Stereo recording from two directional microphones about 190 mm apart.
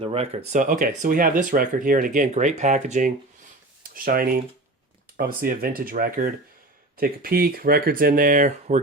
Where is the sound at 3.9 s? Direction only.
50° right (ahead or behind).